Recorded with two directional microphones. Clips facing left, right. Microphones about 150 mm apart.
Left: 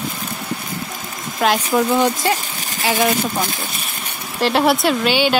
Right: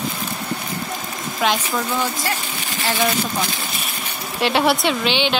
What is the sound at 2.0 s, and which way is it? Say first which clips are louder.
Speech: left 6 dB; 15° left (ahead or behind).